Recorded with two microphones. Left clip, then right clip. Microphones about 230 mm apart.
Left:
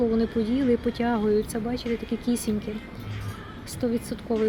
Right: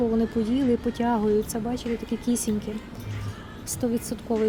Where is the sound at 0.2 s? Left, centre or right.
Centre.